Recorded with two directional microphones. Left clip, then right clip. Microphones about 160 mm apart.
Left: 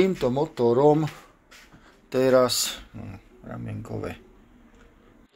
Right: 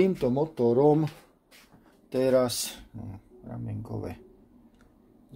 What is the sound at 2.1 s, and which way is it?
Speech, 10° right (ahead or behind).